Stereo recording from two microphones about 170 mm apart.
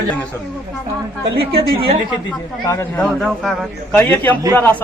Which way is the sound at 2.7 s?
10° left (ahead or behind).